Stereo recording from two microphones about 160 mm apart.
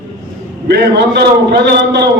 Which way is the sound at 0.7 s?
90° right.